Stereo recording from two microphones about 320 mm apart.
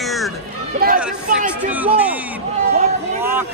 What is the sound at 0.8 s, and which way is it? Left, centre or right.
Speech, right.